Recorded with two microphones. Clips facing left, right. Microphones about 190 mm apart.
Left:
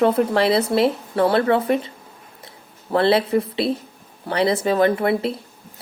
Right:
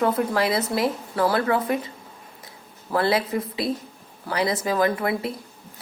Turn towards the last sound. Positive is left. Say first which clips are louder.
# left 5 dB
turn(degrees=30)  # may be behind; listen again after turning